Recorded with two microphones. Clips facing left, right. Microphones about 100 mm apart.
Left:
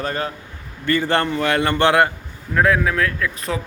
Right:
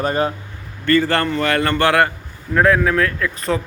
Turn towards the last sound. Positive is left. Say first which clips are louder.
# right 3 dB
turn(degrees=0)  # may be behind; listen again after turning